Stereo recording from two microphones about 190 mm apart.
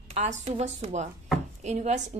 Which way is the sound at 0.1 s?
35° right (ahead or behind).